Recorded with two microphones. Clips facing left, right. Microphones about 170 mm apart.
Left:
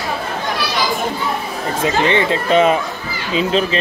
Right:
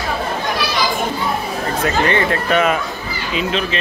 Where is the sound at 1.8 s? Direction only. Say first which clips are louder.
Left 2 dB; 20° left (ahead or behind); by 3.8 s 35° left (ahead or behind).